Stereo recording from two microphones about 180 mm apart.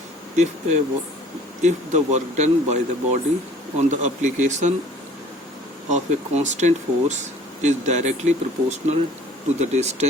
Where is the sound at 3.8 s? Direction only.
40° right (ahead or behind).